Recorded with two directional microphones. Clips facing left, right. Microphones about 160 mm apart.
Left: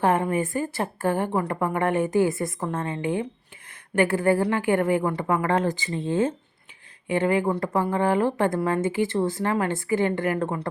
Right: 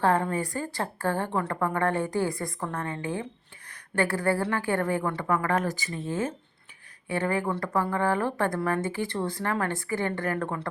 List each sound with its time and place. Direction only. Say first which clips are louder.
0.0 s a woman's voice: left 3 dB; 20° left (ahead or behind)
7.1 s speech: left 5 dB; 20° left (ahead or behind)